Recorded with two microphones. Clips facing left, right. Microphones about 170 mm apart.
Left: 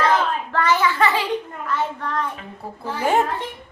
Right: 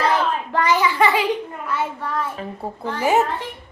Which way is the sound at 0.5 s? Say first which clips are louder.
Even; 15° right (ahead or behind).